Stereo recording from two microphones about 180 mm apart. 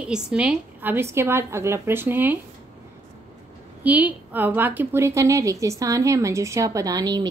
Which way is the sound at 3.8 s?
10° right (ahead or behind).